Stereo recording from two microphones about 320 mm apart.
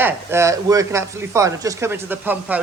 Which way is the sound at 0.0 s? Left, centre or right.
Centre.